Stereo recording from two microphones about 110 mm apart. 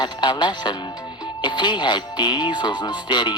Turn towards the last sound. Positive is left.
turn(degrees=45)  # may be behind; listen again after turning